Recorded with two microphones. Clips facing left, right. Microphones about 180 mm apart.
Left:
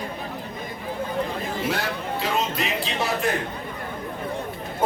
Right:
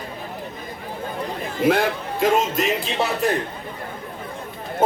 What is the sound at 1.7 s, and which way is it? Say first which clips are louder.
Speech: right 11 dB; 50° right (ahead or behind).